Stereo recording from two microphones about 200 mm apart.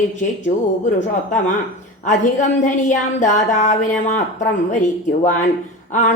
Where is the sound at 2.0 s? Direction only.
40° left (ahead or behind).